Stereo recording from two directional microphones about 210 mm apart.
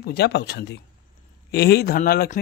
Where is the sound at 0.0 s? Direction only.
50° left (ahead or behind).